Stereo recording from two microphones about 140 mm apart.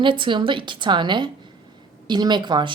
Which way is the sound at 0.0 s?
35° right (ahead or behind).